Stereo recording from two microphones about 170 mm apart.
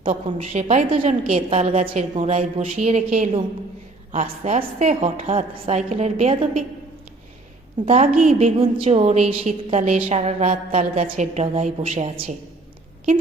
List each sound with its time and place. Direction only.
0.1 s a woman's voice: 45° right (ahead or behind)
7.9 s a woman's voice: 40° right (ahead or behind)